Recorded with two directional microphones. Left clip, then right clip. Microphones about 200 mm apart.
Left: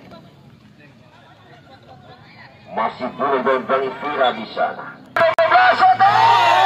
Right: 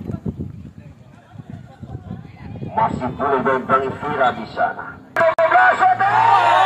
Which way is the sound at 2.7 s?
20° left (ahead or behind).